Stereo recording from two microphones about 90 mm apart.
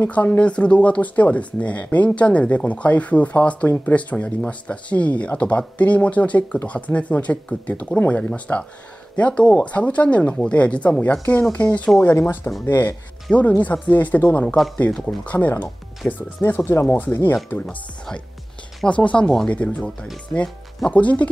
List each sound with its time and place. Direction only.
0.0 s speech: 15° left (ahead or behind)
13.3 s speech: 15° left (ahead or behind)
15.2 s speech: 20° left (ahead or behind)
18.9 s speech: 15° left (ahead or behind)